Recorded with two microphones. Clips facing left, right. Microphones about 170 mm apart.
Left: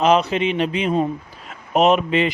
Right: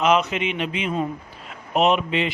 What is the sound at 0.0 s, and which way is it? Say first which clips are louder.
A man's voice: left 3 dB; 35° left (ahead or behind).